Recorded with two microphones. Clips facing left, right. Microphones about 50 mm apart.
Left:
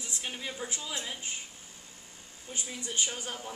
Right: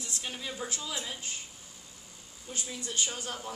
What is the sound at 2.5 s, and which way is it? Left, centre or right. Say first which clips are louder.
Speech: even; centre.